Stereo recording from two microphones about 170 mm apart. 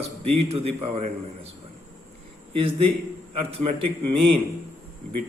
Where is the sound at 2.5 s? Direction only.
35° right (ahead or behind).